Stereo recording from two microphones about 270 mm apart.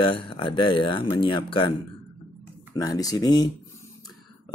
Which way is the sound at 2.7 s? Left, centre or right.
Centre.